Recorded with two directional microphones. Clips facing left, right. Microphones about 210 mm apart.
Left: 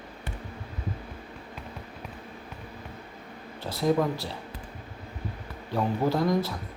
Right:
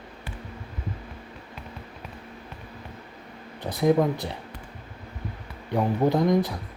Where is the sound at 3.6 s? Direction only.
20° right (ahead or behind).